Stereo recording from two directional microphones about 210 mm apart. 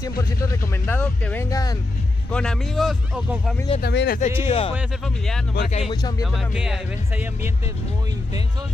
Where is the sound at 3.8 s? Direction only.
45° left (ahead or behind).